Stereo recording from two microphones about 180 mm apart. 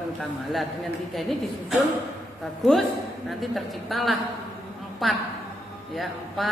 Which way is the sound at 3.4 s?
Centre (ahead or behind).